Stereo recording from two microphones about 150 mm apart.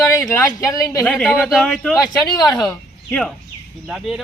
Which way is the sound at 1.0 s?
Centre (ahead or behind).